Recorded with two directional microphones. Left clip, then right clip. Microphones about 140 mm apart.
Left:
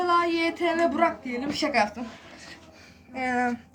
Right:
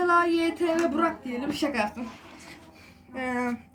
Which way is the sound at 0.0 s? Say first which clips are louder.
Right 1 dB; 50° left (ahead or behind).